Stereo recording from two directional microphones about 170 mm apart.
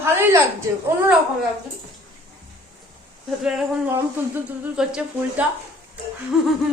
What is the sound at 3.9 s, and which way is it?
Speech, 10° right (ahead or behind).